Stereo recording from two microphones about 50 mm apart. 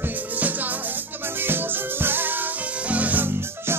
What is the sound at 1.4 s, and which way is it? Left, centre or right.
Music, right.